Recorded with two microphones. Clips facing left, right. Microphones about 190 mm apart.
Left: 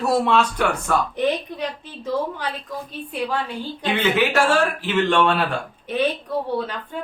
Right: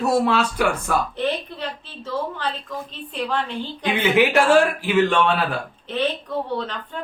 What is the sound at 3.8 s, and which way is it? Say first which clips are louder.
Speech: right 2 dB; 15° right (ahead or behind).